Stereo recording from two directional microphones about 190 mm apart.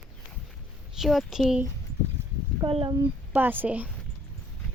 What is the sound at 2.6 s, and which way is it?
Speech, 25° right (ahead or behind).